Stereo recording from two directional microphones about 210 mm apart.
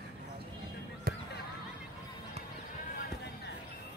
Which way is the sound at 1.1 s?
45° right (ahead or behind).